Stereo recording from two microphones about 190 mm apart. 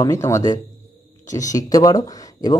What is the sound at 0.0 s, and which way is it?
Speech, 15° left (ahead or behind).